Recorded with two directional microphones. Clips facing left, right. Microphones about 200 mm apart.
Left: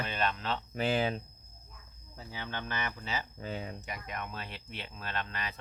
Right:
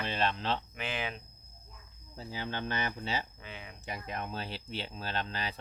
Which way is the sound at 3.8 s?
30° right (ahead or behind).